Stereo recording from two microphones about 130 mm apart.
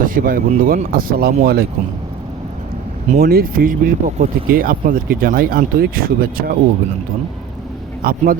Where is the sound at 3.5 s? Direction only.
90° right.